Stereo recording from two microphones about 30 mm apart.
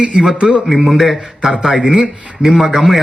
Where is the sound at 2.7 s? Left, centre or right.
Centre.